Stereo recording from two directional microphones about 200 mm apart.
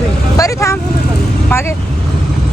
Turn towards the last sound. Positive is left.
turn(degrees=15)  # may be behind; listen again after turning